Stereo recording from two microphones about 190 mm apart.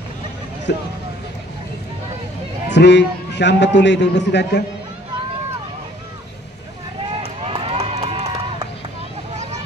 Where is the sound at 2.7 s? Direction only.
65° left (ahead or behind).